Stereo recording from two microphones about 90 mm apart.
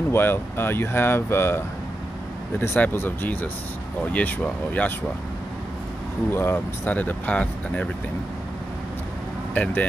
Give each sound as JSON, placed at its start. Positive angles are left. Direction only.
{"t": 0.1, "sound": "speech", "side_deg": 25}
{"t": 2.6, "sound": "speech", "side_deg": 20}
{"t": 6.3, "sound": "speech", "side_deg": 25}
{"t": 9.5, "sound": "speech", "side_deg": 15}